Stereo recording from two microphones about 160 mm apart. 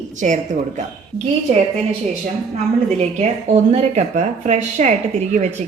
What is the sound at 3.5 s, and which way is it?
A woman's voice, 40° right (ahead or behind).